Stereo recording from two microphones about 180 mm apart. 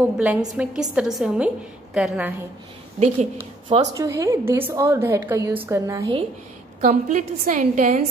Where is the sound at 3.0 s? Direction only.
35° right (ahead or behind).